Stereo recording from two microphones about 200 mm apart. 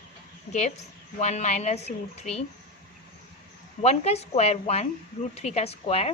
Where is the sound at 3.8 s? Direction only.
30° left (ahead or behind).